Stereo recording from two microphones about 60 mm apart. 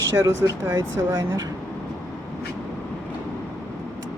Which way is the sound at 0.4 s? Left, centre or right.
Right.